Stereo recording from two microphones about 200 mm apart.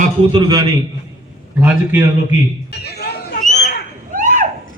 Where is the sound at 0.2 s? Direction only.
20° right (ahead or behind).